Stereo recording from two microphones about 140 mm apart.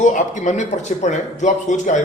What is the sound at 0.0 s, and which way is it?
A man's voice, 60° left (ahead or behind).